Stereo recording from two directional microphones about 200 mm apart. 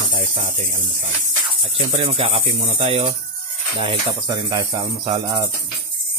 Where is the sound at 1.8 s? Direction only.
30° right (ahead or behind).